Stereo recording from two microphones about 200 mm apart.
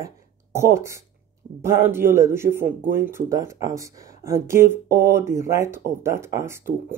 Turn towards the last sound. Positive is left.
turn(degrees=-10)  # may be behind; listen again after turning